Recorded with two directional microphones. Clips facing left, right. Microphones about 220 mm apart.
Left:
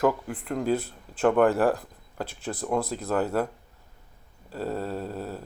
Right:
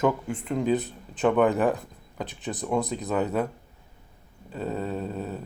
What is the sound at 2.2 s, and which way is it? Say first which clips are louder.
Speech: even; 20° right (ahead or behind).